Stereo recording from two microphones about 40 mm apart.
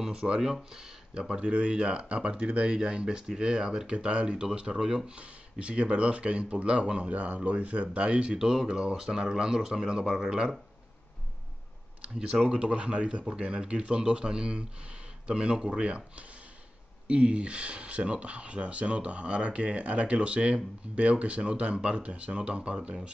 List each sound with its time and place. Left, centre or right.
0.0 s speech: right
3.9 s speech: right
5.1 s speech: right
12.0 s speech: right